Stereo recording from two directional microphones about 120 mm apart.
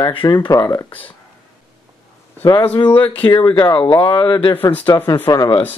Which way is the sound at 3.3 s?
40° left (ahead or behind).